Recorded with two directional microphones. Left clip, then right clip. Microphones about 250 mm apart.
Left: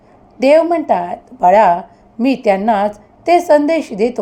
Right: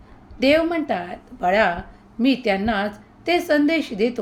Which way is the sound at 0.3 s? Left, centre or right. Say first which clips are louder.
Left 8 dB; centre.